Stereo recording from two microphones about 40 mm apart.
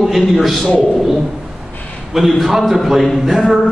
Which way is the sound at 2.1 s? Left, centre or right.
Centre.